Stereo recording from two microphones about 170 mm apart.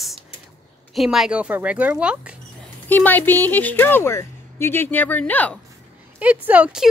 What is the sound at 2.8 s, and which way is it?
Speech, 10° left (ahead or behind).